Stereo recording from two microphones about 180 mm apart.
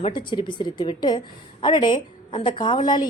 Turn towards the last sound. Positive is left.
turn(degrees=25)  # may be behind; listen again after turning